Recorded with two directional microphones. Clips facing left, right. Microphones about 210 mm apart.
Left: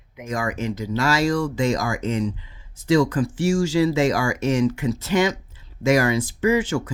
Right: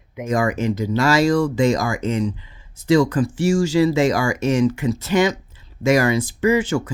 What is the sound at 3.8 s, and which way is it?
Speech, 90° right.